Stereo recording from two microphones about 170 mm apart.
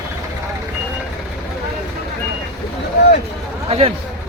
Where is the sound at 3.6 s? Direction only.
35° right (ahead or behind).